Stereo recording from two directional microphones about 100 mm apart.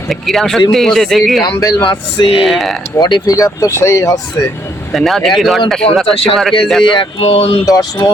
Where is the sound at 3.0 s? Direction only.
40° left (ahead or behind).